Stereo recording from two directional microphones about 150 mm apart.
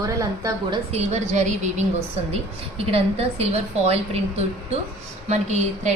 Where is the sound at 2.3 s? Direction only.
40° right (ahead or behind).